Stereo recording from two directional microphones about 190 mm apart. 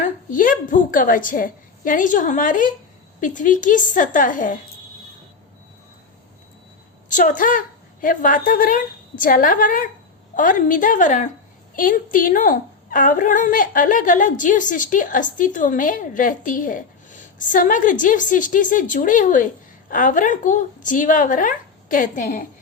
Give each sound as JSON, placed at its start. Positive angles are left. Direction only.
{"t": 0.0, "sound": "a woman's voice", "side_deg": 45}
{"t": 7.1, "sound": "a woman's voice", "side_deg": 45}